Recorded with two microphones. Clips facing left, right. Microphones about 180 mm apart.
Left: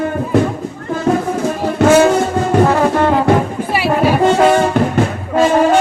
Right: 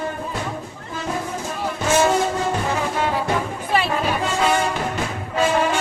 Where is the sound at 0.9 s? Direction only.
60° left (ahead or behind).